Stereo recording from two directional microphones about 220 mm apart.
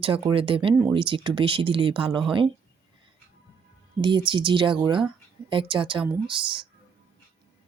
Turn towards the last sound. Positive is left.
turn(degrees=-20)  # may be behind; listen again after turning